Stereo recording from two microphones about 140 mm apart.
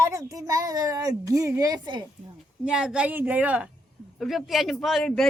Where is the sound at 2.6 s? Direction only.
5° right (ahead or behind).